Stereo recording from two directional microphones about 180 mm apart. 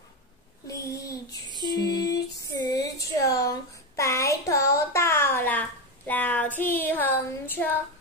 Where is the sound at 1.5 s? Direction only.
25° right (ahead or behind).